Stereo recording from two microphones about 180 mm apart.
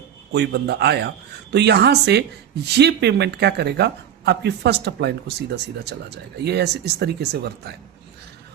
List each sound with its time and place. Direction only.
0.3 s a man's voice: 65° right (ahead or behind)